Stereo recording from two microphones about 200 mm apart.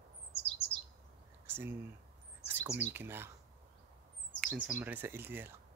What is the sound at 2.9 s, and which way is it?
Speech, 10° right (ahead or behind).